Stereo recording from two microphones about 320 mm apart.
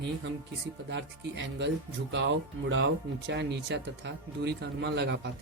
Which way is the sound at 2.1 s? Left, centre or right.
Right.